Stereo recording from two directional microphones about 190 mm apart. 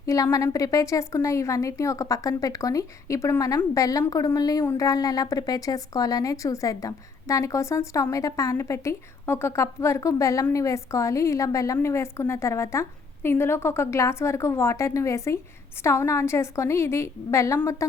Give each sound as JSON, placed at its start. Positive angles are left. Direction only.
{"t": 0.0, "sound": "a woman's voice", "side_deg": 15}